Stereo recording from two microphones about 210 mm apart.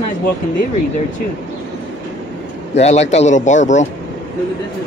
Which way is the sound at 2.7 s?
30° left (ahead or behind).